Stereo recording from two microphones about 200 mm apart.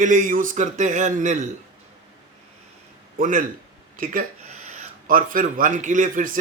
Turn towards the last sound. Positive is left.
turn(degrees=-40)  # may be behind; listen again after turning